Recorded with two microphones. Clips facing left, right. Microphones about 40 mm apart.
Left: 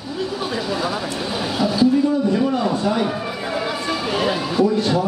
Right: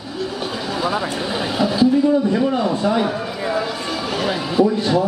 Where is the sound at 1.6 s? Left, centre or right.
Right.